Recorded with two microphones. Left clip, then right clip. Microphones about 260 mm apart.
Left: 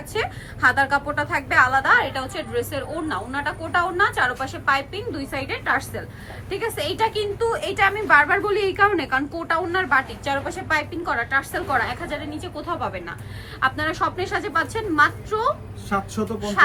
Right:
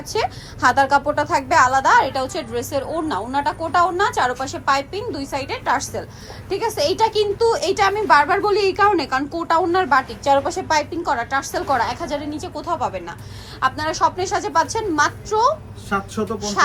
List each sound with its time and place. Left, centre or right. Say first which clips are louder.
0.1 s a woman's voice: right 4 dB; centre
15.9 s a man's voice: right 2 dB; centre
16.4 s a woman's voice: left 1 dB; centre